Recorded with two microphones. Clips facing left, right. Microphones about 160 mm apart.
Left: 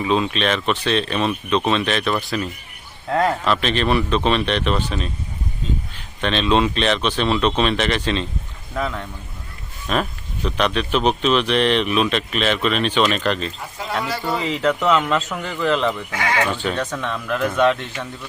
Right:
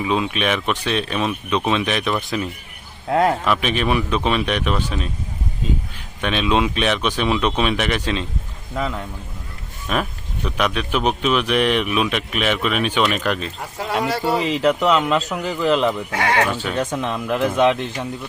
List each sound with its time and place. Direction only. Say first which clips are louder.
0.0 s speech: left 1 dB; 10° right (ahead or behind)
6.2 s speech: left 1 dB; 10° right (ahead or behind)
14.5 s speech: left 1 dB; centre (ahead or behind)
16.2 s speech: right 2 dB; 60° right (ahead or behind)
16.5 s speech: even; 10° right (ahead or behind)
16.8 s speech: right 3 dB; 25° right (ahead or behind)